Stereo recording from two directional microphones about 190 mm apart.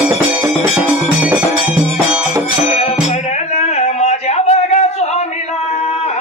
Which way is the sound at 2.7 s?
35° left (ahead or behind).